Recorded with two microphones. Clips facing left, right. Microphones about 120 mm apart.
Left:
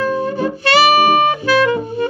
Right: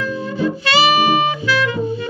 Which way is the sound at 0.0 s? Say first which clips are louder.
Left 3 dB; 55° left (ahead or behind).